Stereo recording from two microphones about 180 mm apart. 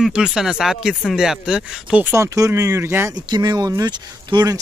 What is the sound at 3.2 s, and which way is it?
Speech, 25° right (ahead or behind).